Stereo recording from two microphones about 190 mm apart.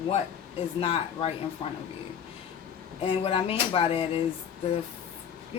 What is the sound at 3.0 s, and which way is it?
Speech, 30° left (ahead or behind).